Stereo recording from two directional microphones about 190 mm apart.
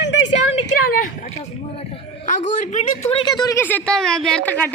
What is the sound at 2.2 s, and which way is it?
Speech, 40° left (ahead or behind).